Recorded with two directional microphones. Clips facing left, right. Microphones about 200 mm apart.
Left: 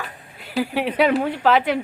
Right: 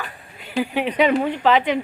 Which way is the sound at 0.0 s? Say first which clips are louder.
Even; 5° left (ahead or behind).